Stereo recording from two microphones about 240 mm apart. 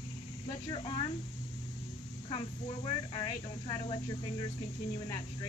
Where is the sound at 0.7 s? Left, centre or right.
Left.